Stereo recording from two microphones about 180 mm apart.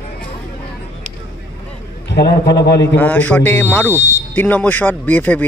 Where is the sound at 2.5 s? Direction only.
70° left (ahead or behind).